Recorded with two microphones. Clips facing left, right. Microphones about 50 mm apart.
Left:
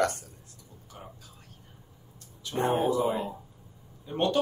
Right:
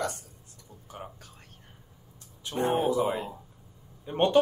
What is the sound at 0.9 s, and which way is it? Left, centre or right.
Whispering, right.